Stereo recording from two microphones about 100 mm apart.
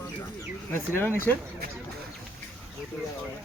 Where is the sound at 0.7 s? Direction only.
20° left (ahead or behind).